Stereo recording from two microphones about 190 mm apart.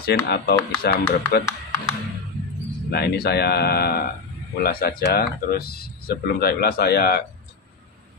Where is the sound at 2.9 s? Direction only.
60° left (ahead or behind).